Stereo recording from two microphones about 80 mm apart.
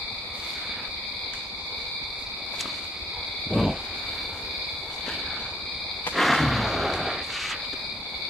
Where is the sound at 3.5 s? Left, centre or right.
Centre.